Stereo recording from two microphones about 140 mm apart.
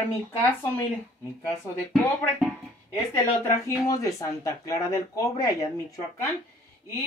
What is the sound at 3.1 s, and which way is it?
Speech, 20° left (ahead or behind).